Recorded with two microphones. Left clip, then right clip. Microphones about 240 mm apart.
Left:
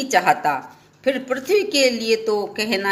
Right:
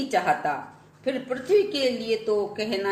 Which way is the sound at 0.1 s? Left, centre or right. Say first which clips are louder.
Left 7 dB; left.